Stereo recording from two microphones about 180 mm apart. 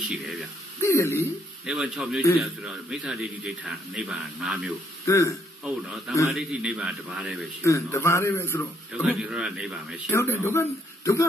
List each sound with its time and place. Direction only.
0.1 s a man's voice: centre (ahead or behind)
0.8 s speech: 15° left (ahead or behind)
1.7 s a man's voice: 5° right (ahead or behind)
5.0 s a man's voice: 15° left (ahead or behind)
5.6 s a man's voice: 5° right (ahead or behind)
7.6 s speech: 15° left (ahead or behind)
9.1 s a man's voice: 5° right (ahead or behind)
10.1 s speech: 15° left (ahead or behind)